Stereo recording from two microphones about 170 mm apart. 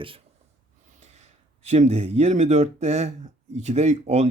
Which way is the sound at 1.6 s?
40° right (ahead or behind).